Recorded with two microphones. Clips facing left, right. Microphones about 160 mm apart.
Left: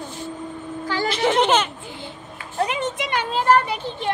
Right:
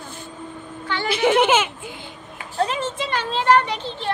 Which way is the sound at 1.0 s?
5° right (ahead or behind).